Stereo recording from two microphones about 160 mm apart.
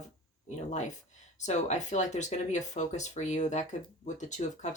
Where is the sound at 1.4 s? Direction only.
45° left (ahead or behind).